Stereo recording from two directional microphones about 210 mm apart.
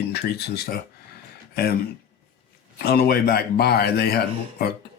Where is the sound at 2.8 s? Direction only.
45° left (ahead or behind).